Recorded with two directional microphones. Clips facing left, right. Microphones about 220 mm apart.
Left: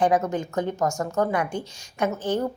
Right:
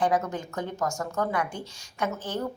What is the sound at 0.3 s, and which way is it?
A woman's voice, 20° left (ahead or behind).